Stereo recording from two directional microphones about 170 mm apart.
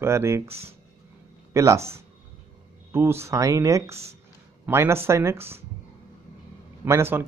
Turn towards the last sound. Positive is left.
turn(degrees=-15)  # may be behind; listen again after turning